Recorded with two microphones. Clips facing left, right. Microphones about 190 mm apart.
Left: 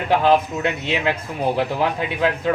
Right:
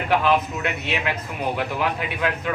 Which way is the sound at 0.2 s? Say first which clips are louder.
Left 4 dB; 35° left (ahead or behind).